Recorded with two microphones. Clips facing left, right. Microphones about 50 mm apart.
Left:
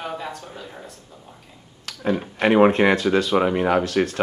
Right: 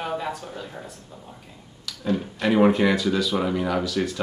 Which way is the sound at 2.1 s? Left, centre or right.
Left.